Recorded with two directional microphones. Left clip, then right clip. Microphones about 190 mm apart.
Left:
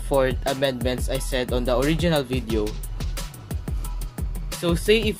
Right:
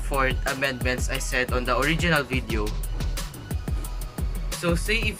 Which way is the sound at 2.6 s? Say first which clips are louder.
Left 3 dB; centre (ahead or behind).